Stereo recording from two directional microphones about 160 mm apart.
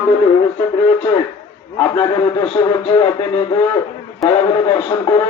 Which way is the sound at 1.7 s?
20° left (ahead or behind).